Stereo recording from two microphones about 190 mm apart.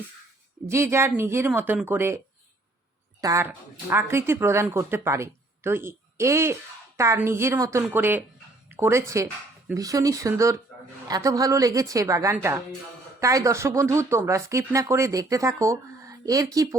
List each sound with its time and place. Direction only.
0.7 s speech: 15° right (ahead or behind)
3.2 s speech: 15° right (ahead or behind)